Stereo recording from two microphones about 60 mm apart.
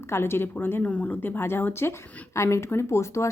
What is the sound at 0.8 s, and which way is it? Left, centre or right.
Speech, left.